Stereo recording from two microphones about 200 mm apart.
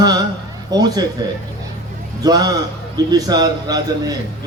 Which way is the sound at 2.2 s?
20° right (ahead or behind).